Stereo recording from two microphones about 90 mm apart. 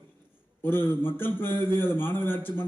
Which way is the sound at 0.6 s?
25° left (ahead or behind).